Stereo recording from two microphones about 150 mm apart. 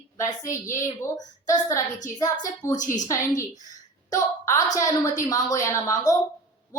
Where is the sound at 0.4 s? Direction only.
20° left (ahead or behind).